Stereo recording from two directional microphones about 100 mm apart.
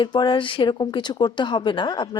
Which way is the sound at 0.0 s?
50° left (ahead or behind).